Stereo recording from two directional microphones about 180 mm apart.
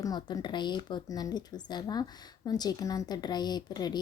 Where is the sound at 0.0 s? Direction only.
25° left (ahead or behind).